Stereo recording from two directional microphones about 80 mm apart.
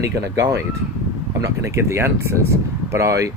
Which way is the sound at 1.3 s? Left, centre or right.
Right.